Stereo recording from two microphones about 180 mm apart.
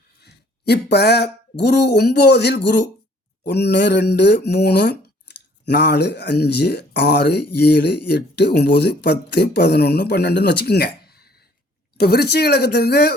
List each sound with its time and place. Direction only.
0.2 s speech: 65° left (ahead or behind)